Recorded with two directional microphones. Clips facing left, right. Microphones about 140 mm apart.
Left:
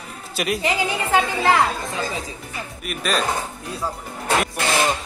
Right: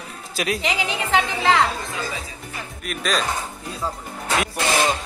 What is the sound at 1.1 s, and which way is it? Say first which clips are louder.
Speech: left 1 dB; 15° left (ahead or behind).